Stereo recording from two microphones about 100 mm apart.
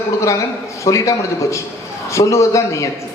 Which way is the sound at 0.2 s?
30° left (ahead or behind).